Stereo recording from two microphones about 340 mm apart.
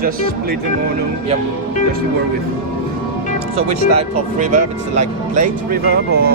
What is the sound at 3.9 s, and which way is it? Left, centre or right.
Speech, right.